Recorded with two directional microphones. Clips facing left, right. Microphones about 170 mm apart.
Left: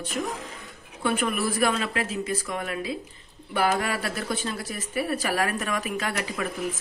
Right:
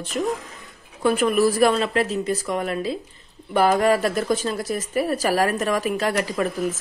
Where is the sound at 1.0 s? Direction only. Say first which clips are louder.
Right 7 dB; 40° right (ahead or behind).